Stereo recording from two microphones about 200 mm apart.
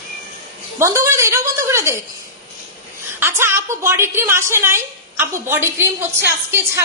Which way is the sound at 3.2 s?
10° right (ahead or behind).